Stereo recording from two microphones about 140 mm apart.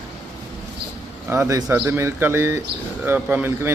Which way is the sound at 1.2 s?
20° right (ahead or behind).